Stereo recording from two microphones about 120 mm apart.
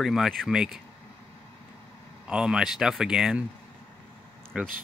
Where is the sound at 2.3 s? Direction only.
5° right (ahead or behind).